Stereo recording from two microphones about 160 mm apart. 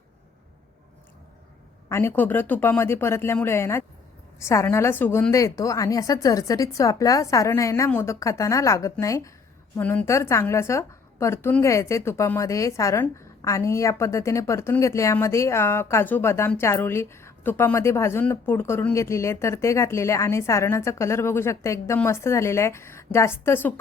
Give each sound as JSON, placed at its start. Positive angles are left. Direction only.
{"t": 1.9, "sound": "a woman's voice", "side_deg": 15}